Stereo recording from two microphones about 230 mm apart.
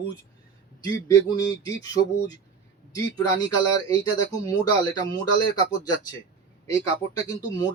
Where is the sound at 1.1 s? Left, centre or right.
Centre.